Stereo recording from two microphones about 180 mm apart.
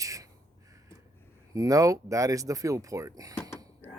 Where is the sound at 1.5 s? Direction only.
20° right (ahead or behind).